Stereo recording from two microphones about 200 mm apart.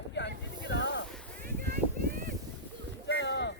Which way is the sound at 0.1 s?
60° left (ahead or behind).